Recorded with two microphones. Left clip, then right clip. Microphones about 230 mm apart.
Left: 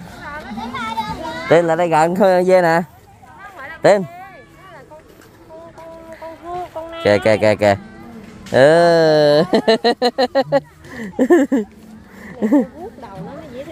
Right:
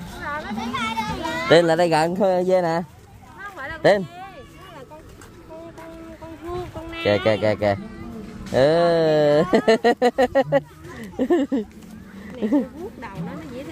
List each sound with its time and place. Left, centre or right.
0.7 s music: right
1.0 s children playing: right
1.6 s speech: centre
2.1 s speech: centre
3.5 s a sound: right
7.0 s speech: left